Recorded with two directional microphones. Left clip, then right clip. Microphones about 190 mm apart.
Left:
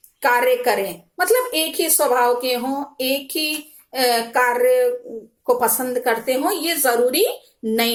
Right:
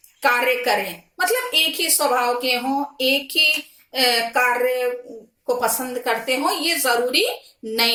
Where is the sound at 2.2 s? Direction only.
25° right (ahead or behind).